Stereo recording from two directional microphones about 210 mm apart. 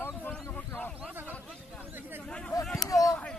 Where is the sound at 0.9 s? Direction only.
5° right (ahead or behind).